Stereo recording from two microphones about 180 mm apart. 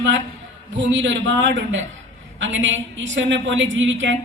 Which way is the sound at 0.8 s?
90° right.